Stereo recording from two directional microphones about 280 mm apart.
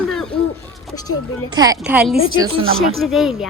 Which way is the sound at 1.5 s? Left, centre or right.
Centre.